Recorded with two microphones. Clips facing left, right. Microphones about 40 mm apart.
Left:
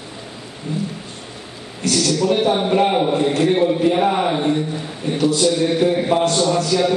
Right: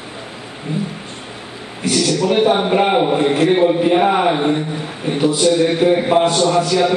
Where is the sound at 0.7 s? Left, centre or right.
Right.